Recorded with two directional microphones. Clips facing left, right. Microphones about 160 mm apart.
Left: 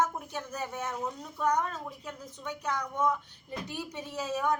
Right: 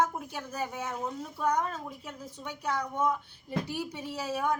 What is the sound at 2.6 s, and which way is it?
A woman's voice, 10° right (ahead or behind).